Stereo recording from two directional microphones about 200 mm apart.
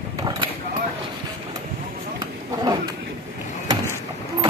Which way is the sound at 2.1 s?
20° right (ahead or behind).